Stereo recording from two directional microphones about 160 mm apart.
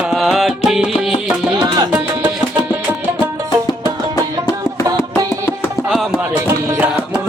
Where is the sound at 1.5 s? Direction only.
25° right (ahead or behind).